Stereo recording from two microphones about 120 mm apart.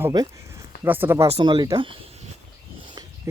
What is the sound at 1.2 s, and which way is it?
Speech, 50° right (ahead or behind).